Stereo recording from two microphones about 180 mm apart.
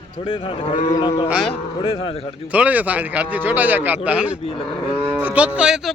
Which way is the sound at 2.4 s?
10° right (ahead or behind).